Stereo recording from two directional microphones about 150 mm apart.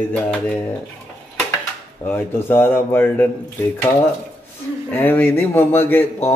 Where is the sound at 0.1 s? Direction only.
10° left (ahead or behind).